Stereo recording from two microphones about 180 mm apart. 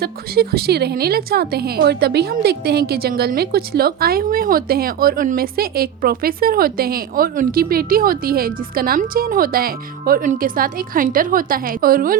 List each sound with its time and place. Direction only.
0.0 s a woman's voice: 60° right (ahead or behind)